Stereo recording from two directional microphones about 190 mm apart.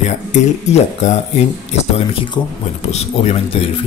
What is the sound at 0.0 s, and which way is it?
Speech, 40° left (ahead or behind).